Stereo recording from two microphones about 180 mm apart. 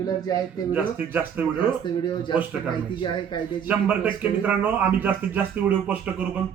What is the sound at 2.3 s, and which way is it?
Speech, 25° left (ahead or behind).